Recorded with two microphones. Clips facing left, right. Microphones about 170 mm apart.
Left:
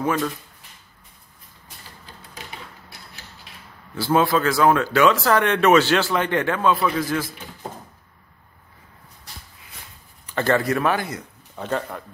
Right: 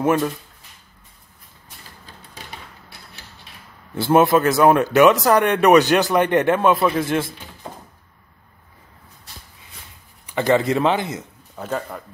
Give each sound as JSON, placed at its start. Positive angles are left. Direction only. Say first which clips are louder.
{"t": 0.0, "sound": "speech", "louder": "right 4 dB", "side_deg": -15}
{"t": 3.9, "sound": "speech", "louder": "right 4 dB", "side_deg": -20}
{"t": 10.2, "sound": "speech", "louder": "right 3 dB", "side_deg": -15}
{"t": 11.5, "sound": "a man's voice", "louder": "even", "side_deg": -5}